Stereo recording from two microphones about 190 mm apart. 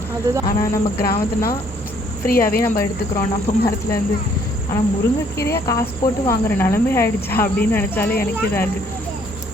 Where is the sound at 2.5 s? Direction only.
10° left (ahead or behind).